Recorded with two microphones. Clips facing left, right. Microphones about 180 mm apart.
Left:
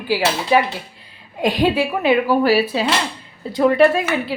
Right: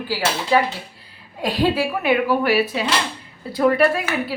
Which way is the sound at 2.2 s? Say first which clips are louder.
Left 3 dB; 30° left (ahead or behind).